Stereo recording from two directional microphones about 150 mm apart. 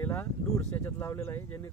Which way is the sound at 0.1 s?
15° left (ahead or behind).